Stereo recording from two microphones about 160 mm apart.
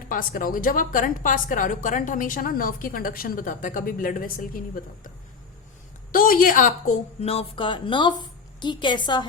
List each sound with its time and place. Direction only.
0.1 s a woman's voice: 60° left (ahead or behind); by 9.2 s 30° left (ahead or behind)